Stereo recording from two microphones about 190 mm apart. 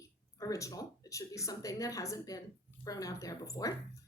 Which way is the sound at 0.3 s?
15° left (ahead or behind).